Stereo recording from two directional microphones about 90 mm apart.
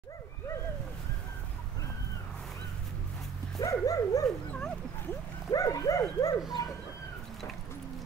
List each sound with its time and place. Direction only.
3.5 s dog: 40° left (ahead or behind)
4.5 s dog: 15° left (ahead or behind)
5.5 s dog: 40° left (ahead or behind)
6.6 s a sound: 40° left (ahead or behind)